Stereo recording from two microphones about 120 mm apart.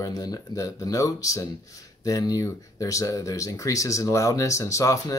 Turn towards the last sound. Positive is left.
turn(degrees=25)  # may be behind; listen again after turning